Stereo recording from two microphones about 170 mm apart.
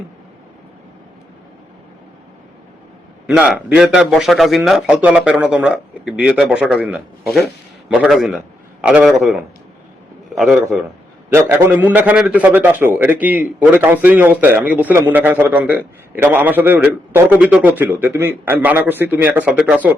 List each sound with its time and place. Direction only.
3.2 s a man's voice: 5° right (ahead or behind)
11.3 s a man's voice: 15° right (ahead or behind)